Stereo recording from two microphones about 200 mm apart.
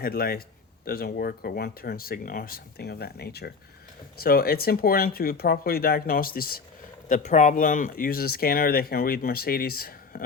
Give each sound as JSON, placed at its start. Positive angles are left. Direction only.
{"t": 0.0, "sound": "speech", "side_deg": 50}
{"t": 7.1, "sound": "speech", "side_deg": 35}